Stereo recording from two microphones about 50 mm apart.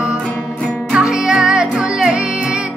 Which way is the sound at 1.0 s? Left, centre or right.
Centre.